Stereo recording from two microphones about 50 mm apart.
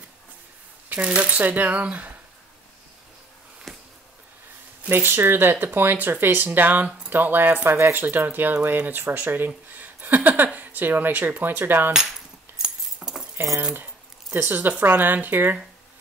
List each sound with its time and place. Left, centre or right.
1.0 s speech: right
3.7 s a sound: centre
4.8 s speech: right
12.6 s keys jangling: centre
14.3 s speech: right